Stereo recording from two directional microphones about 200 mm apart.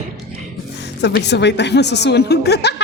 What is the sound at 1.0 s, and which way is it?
A woman's voice, 60° left (ahead or behind).